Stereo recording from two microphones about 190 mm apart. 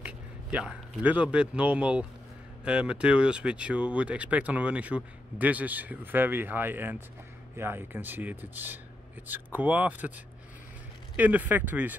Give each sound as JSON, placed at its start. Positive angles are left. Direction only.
{"t": 0.0, "sound": "speech", "side_deg": -5}